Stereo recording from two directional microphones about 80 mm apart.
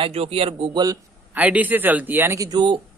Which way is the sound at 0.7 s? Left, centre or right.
Right.